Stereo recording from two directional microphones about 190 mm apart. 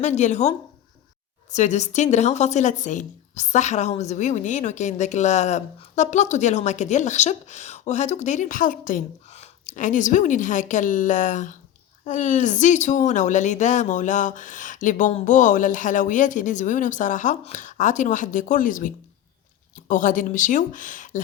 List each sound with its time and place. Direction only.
0.0 s a woman's voice: 40° left (ahead or behind)
1.5 s a woman's voice: 40° left (ahead or behind)